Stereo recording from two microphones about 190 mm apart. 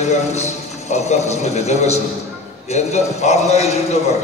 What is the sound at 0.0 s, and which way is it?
A man's voice, 35° left (ahead or behind).